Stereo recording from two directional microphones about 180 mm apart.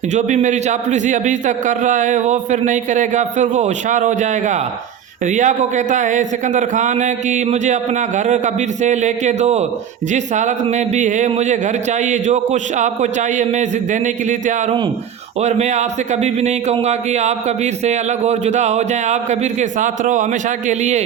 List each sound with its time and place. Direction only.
0.1 s a man's voice: 45° right (ahead or behind)